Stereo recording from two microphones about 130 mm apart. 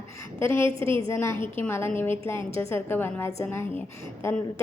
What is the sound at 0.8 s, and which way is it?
Speech, 45° right (ahead or behind).